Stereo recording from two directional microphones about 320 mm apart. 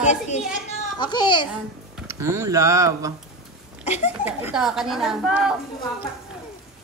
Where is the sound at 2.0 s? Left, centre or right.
Centre.